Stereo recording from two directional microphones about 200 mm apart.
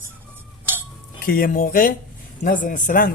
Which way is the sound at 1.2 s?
45° left (ahead or behind).